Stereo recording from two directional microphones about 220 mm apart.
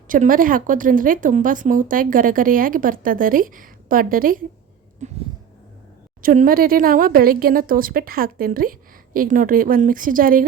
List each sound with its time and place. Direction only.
0.1 s a woman's voice: 40° right (ahead or behind)
6.2 s a woman's voice: 40° right (ahead or behind)